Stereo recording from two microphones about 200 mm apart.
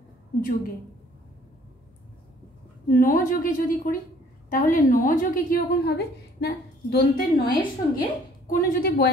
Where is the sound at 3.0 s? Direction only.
40° left (ahead or behind).